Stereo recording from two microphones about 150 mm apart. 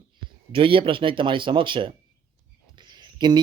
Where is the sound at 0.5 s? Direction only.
35° right (ahead or behind).